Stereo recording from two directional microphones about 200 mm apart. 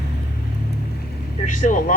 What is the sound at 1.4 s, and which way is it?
Speech, 40° left (ahead or behind).